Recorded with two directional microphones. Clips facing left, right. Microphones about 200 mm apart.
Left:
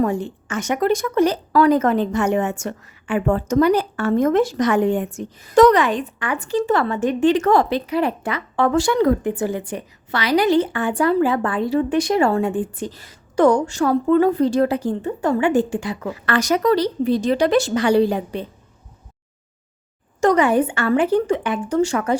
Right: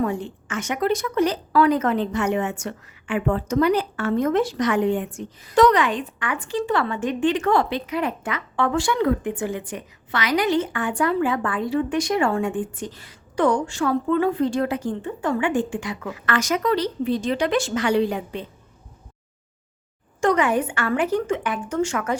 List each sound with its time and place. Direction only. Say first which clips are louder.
0.0 s a woman's voice: left 4 dB; 40° left (ahead or behind)
20.2 s a woman's voice: left 4 dB; 35° left (ahead or behind)